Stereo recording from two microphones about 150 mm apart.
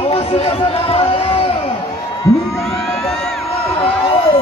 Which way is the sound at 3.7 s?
35° left (ahead or behind).